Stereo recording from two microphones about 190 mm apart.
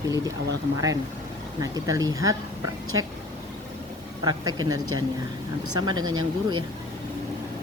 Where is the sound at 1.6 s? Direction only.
15° right (ahead or behind).